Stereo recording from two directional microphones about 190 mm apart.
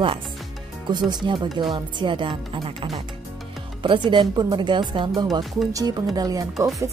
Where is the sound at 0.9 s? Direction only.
25° right (ahead or behind).